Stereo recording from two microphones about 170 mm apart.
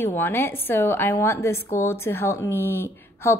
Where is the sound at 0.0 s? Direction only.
15° left (ahead or behind).